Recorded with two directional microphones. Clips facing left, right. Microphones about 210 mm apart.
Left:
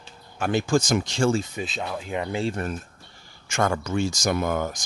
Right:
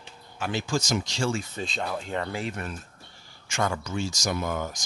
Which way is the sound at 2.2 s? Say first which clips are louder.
Left 5 dB; 25° left (ahead or behind).